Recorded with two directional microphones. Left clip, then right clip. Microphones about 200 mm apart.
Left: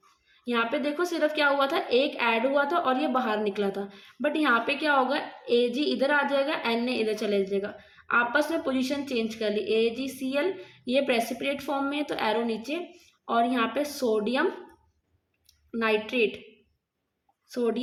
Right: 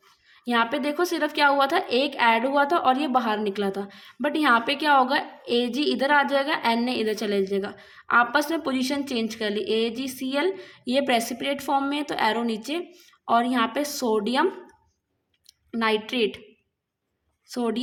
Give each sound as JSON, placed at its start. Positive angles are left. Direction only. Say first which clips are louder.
{"t": 0.4, "sound": "a woman's voice", "louder": "right 3 dB", "side_deg": -35}
{"t": 15.7, "sound": "a woman's voice", "louder": "right 2 dB", "side_deg": -35}
{"t": 17.5, "sound": "a woman's voice", "louder": "even", "side_deg": -35}